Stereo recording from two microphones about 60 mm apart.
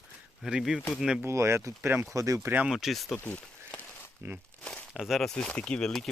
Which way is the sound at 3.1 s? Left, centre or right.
Left.